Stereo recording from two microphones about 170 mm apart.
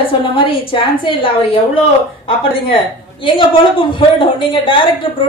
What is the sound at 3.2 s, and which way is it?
A woman's voice, 30° left (ahead or behind).